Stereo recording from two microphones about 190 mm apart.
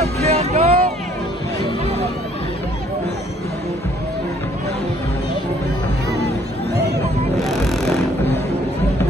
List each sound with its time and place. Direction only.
0.0 s vehicle: 35° right (ahead or behind)
7.3 s vehicle: centre (ahead or behind)